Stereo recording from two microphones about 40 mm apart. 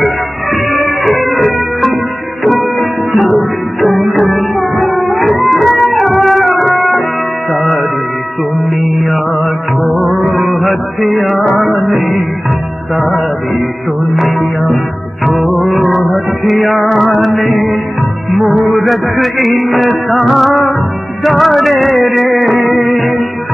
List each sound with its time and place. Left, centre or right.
0.7 s music: centre
3.1 s music: centre
3.8 s music: left
5.5 s music: centre
9.8 s music: right
10.4 s music: centre
16.4 s music: centre
18.8 s music: centre